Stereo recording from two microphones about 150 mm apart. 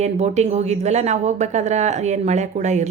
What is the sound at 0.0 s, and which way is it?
A woman's voice, 45° right (ahead or behind).